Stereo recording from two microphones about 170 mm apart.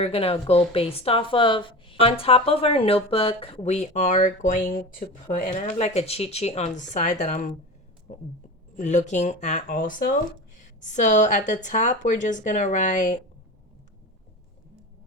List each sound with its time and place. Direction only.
0.0 s a woman's voice: 35° left (ahead or behind)